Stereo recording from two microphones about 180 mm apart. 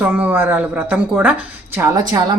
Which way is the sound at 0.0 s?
10° right (ahead or behind).